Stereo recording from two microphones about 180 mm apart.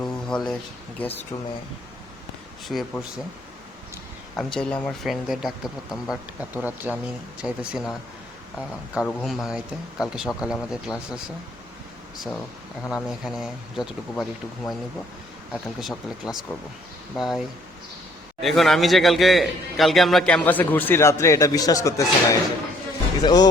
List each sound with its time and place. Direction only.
0.0 s a sound: 5° left (ahead or behind)
1.0 s speech: 10° left (ahead or behind)
2.6 s a man's voice: centre (ahead or behind)
4.4 s a man's voice: 5° left (ahead or behind)
9.0 s a man's voice: centre (ahead or behind)
12.9 s a man's voice: centre (ahead or behind)
15.8 s a man's voice: centre (ahead or behind)
18.4 s a man's voice: centre (ahead or behind); by 23.5 s 20° left (ahead or behind)